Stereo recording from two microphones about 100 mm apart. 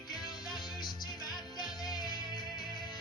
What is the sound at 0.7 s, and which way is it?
Music, 45° left (ahead or behind).